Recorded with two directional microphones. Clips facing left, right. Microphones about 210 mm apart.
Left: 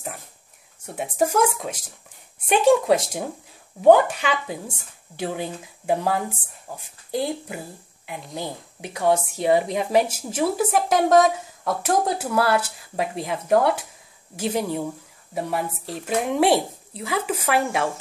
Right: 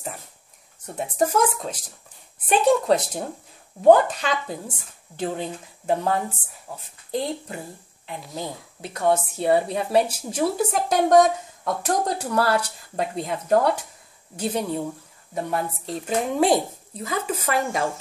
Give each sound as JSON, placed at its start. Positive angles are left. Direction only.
{"t": 0.8, "sound": "a woman's voice", "side_deg": 10}
{"t": 8.8, "sound": "a woman's voice", "side_deg": 10}